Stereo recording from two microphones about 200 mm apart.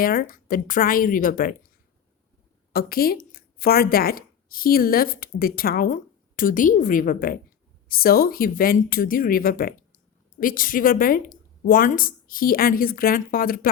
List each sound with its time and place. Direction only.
0.0 s a woman's voice: 45° left (ahead or behind)
2.7 s a woman's voice: 50° left (ahead or behind)